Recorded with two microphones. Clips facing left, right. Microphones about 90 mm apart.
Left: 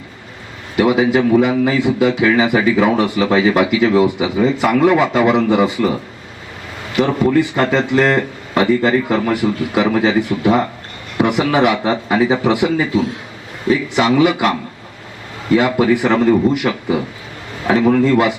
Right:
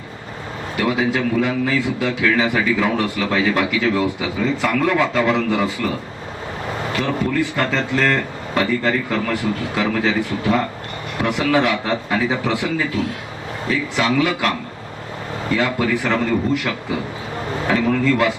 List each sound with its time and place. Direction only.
0.8 s a man's voice: 15° left (ahead or behind)
6.9 s a man's voice: 20° left (ahead or behind)
15.5 s a man's voice: 20° left (ahead or behind)